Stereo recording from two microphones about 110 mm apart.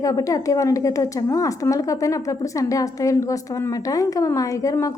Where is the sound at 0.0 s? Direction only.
30° left (ahead or behind).